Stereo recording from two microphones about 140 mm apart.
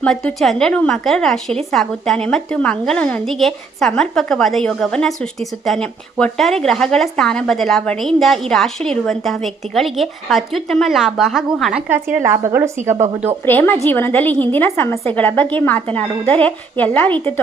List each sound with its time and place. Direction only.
0.0 s a woman's voice: 5° left (ahead or behind)
12.1 s a woman's voice: 20° right (ahead or behind)
13.4 s speech: 15° left (ahead or behind)